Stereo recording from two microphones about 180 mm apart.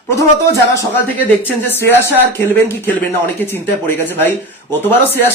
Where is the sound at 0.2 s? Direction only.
15° left (ahead or behind).